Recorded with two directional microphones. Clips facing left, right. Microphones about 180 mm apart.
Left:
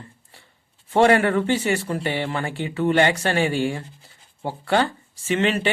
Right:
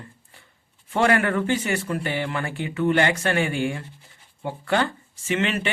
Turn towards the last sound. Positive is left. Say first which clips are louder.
# left 3 dB
turn(degrees=35)  # may be behind; listen again after turning